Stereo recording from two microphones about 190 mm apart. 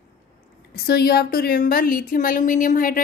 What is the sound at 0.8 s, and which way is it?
A woman's voice, 55° left (ahead or behind).